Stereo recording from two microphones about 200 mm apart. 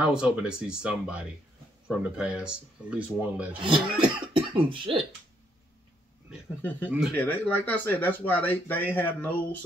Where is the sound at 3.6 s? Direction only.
25° right (ahead or behind).